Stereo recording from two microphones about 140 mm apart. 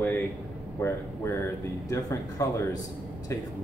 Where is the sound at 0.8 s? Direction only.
20° left (ahead or behind).